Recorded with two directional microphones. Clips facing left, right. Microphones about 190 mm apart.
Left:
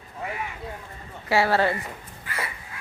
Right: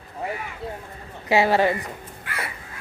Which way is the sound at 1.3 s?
20° right (ahead or behind).